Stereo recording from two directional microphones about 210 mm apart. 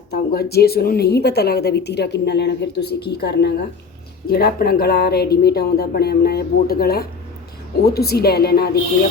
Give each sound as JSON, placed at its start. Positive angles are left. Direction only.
{"t": 0.1, "sound": "a woman's voice", "side_deg": 45}